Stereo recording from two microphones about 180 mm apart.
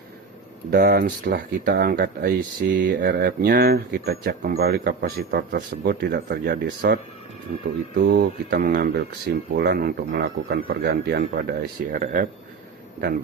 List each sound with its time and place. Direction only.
0.7 s speech: 55° right (ahead or behind); by 3.0 s 75° right (ahead or behind)
3.1 s speech: 60° right (ahead or behind)